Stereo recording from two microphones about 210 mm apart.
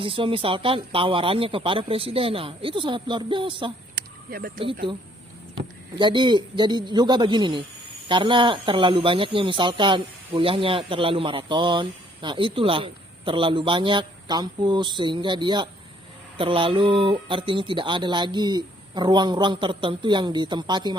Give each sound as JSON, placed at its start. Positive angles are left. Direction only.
{"t": 0.0, "sound": "speech", "side_deg": -25}
{"t": 3.9, "sound": "a sound", "side_deg": -45}
{"t": 6.0, "sound": "speech", "side_deg": -20}